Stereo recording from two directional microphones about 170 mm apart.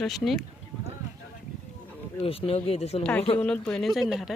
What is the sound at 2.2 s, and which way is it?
Speech, 35° left (ahead or behind).